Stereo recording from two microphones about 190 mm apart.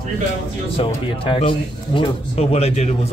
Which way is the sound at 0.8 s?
30° left (ahead or behind).